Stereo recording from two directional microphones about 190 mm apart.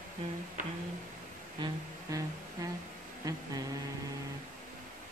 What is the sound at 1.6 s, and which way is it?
Music, 15° right (ahead or behind).